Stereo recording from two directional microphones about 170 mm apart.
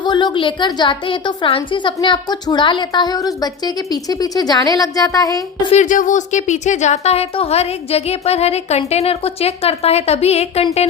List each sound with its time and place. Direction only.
0.0 s a woman's voice: 25° left (ahead or behind)
5.7 s a woman's voice: 50° left (ahead or behind)